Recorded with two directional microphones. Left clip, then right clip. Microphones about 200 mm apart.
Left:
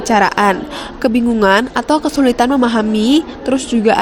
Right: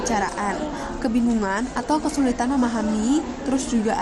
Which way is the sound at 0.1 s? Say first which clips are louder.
Left 15 dB; 35° left (ahead or behind).